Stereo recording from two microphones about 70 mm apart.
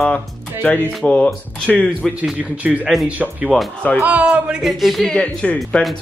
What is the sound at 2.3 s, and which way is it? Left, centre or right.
A man's voice, right.